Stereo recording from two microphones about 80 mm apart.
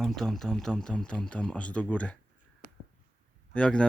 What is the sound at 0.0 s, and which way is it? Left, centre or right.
Speech, centre.